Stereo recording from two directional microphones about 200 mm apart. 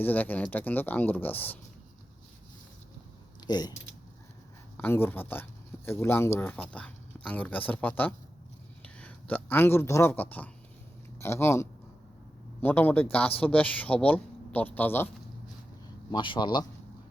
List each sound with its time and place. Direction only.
0.0 s speech: 10° left (ahead or behind)
3.4 s speech: 20° left (ahead or behind)
4.8 s a man's voice: 10° left (ahead or behind)
16.1 s speech: 25° left (ahead or behind)